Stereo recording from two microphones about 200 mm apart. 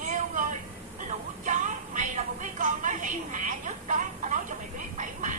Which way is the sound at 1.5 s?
40° right (ahead or behind).